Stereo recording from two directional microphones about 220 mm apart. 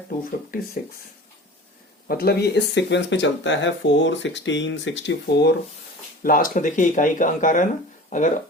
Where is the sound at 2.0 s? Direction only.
45° left (ahead or behind).